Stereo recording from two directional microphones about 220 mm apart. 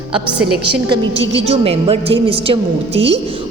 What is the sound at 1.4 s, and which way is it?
A woman's voice, 25° right (ahead or behind).